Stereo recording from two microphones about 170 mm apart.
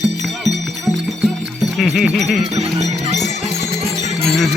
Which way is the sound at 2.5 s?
40° right (ahead or behind).